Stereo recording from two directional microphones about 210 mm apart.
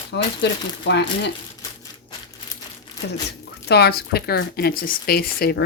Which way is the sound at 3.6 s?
50° left (ahead or behind).